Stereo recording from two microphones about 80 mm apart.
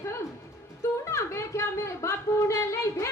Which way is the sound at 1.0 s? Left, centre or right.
Left.